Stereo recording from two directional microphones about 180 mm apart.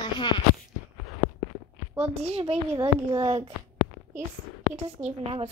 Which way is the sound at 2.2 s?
35° right (ahead or behind).